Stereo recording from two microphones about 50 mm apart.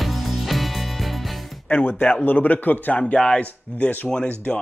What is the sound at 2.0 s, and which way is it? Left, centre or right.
Speech, left.